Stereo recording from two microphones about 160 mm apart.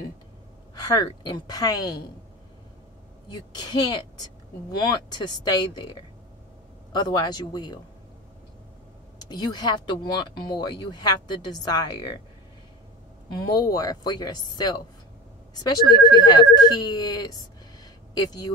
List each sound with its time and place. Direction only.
0.8 s speech: 25° left (ahead or behind)
3.3 s speech: 25° left (ahead or behind)
5.1 s speech: 25° left (ahead or behind)
9.2 s speech: 25° left (ahead or behind)
13.5 s speech: 25° left (ahead or behind)